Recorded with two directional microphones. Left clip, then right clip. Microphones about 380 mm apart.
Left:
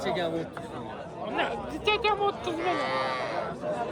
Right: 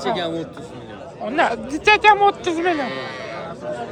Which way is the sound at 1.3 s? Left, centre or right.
Centre.